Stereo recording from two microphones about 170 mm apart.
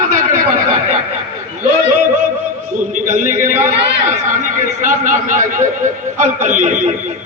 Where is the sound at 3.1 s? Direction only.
50° right (ahead or behind).